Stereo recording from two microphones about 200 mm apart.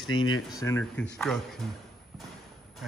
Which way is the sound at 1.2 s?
Centre (ahead or behind).